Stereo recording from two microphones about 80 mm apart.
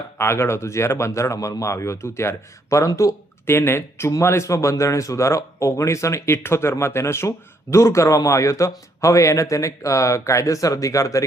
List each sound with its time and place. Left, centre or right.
0.2 s speech: left
3.4 s speech: left